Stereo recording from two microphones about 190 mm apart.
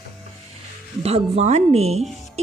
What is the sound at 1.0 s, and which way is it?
Speech, 30° right (ahead or behind).